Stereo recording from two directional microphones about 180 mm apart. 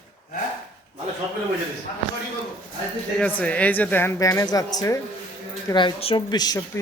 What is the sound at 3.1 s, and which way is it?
A woman's voice, 10° left (ahead or behind).